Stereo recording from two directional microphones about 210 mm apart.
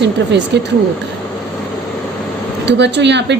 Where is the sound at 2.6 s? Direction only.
55° right (ahead or behind).